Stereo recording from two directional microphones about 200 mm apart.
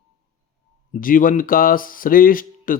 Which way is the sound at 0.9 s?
45° left (ahead or behind).